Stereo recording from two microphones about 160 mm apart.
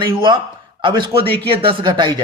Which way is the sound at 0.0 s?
30° right (ahead or behind).